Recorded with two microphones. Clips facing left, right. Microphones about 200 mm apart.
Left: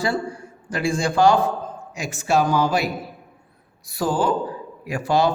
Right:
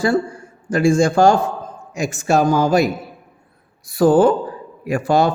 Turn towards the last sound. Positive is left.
turn(degrees=-50)  # may be behind; listen again after turning